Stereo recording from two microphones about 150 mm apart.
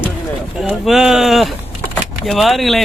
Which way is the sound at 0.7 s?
5° right (ahead or behind).